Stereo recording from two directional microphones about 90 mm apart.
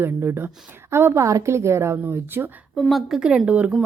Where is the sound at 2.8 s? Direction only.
Centre (ahead or behind); by 3.7 s 15° right (ahead or behind).